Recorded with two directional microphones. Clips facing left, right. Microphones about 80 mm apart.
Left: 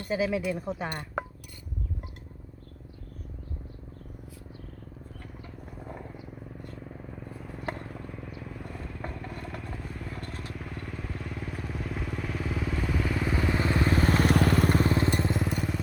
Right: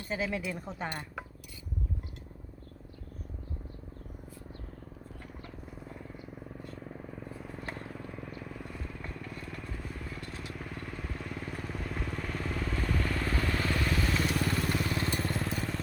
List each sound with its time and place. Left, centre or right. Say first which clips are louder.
0.1 s speech: left 6 dB; centre
1.2 s a sound: left 9 dB; left
6.8 s vehicle: left 1 dB; centre
9.0 s motorcycle: left 4 dB; centre
10.5 s vehicle: left 2 dB; centre; by 15.1 s left
15.2 s vehicle: left 5 dB; centre
15.4 s vehicle: left 4 dB; centre